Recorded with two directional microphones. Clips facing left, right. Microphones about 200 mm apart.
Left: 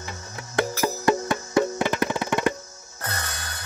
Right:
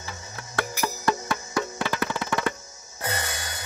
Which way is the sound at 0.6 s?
20° left (ahead or behind).